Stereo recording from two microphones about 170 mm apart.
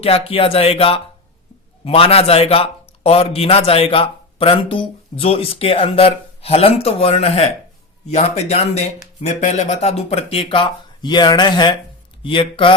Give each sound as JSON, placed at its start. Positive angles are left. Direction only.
{"t": 0.0, "sound": "a man's voice", "side_deg": 35}